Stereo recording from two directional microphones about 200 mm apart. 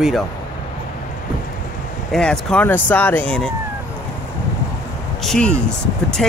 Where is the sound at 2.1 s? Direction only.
5° left (ahead or behind).